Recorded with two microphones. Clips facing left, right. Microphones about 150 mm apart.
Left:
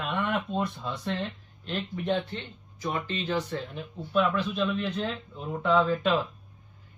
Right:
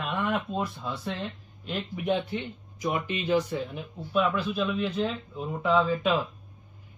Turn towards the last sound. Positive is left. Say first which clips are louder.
# even
turn(degrees=0)  # may be behind; listen again after turning